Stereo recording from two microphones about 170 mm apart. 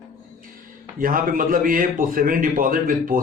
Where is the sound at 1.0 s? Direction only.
55° right (ahead or behind).